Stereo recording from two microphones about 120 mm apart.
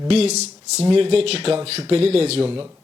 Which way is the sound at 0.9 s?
55° right (ahead or behind).